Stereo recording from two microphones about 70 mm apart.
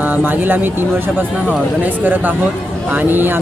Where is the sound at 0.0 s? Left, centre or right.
Right.